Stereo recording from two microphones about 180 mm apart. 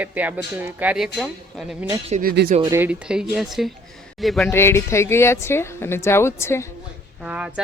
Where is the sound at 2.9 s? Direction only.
5° right (ahead or behind).